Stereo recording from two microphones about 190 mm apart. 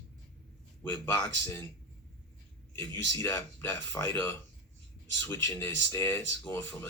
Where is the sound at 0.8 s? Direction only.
10° left (ahead or behind).